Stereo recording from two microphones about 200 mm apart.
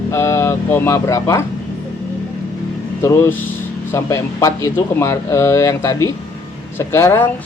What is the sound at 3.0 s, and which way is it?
Speech, 10° left (ahead or behind).